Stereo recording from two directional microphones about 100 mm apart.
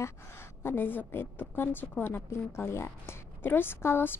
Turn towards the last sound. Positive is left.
turn(degrees=20)  # may be behind; listen again after turning